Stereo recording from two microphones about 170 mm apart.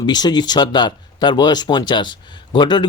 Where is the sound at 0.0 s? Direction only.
25° left (ahead or behind).